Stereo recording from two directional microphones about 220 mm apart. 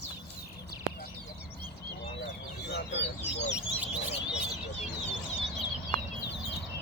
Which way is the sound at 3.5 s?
5° right (ahead or behind).